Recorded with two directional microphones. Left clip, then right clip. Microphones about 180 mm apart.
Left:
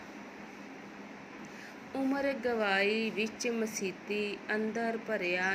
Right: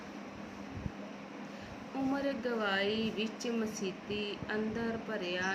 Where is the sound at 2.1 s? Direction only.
20° left (ahead or behind).